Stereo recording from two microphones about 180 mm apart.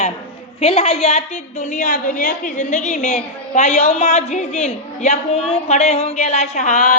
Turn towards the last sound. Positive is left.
turn(degrees=50)  # may be behind; listen again after turning